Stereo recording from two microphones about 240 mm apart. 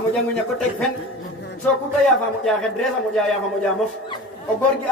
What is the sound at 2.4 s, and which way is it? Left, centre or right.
Speech, centre.